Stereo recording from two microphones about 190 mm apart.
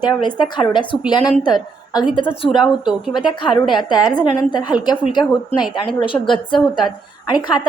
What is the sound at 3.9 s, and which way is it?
A woman's voice, 20° left (ahead or behind).